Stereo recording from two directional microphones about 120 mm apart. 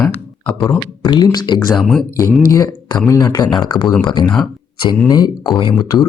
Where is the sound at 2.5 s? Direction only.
30° left (ahead or behind).